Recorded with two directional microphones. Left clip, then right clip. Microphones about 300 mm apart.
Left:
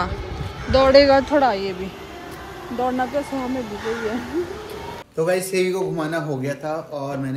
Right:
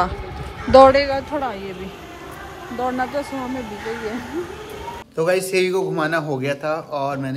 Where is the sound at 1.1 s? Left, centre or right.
Left.